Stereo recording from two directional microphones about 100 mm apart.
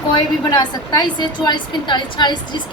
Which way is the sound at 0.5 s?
45° left (ahead or behind).